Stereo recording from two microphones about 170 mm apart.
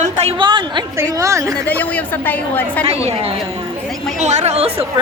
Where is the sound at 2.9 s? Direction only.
35° right (ahead or behind).